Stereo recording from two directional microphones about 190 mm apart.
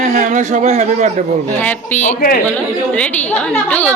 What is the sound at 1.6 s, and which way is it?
Speech, 10° left (ahead or behind).